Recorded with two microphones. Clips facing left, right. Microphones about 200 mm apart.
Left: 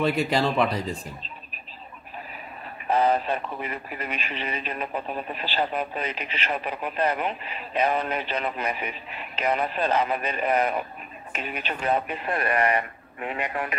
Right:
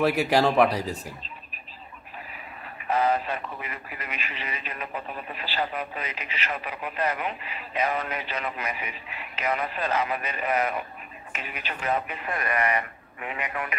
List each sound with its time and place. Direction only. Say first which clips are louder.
0.0 s speech: right 1 dB; 70° right (ahead or behind)
2.9 s speech: left 2 dB; 30° left (ahead or behind)